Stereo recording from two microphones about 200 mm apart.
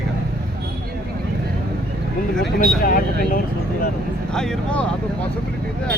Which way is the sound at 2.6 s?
45° left (ahead or behind).